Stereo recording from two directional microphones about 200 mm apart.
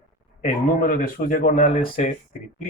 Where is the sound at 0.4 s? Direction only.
40° left (ahead or behind).